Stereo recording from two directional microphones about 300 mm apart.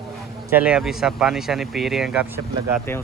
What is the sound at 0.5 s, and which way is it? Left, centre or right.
Speech, centre.